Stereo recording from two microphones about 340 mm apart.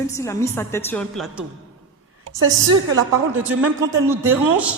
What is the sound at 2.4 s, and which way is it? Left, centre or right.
A woman's voice, right.